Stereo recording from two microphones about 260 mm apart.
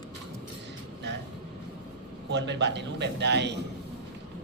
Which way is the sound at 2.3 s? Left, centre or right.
Right.